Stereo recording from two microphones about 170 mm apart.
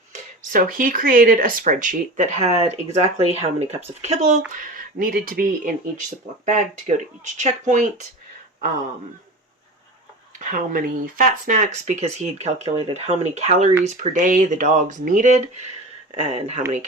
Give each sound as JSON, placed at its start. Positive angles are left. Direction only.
{"t": 0.1, "sound": "speech", "side_deg": -50}
{"t": 10.4, "sound": "speech", "side_deg": -50}